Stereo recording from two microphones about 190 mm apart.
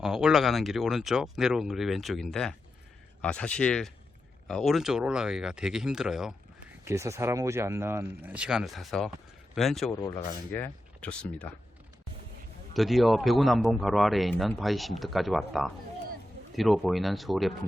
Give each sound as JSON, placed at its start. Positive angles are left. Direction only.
{"t": 0.0, "sound": "speech", "side_deg": -5}
{"t": 6.8, "sound": "speech", "side_deg": -15}
{"t": 9.9, "sound": "speech", "side_deg": 15}
{"t": 12.7, "sound": "speech", "side_deg": 0}